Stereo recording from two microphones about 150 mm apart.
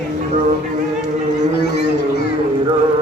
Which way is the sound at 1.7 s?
90° left.